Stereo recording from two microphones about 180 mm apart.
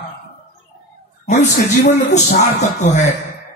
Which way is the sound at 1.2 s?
40° left (ahead or behind).